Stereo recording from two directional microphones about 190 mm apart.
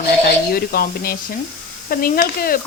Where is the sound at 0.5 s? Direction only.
50° left (ahead or behind).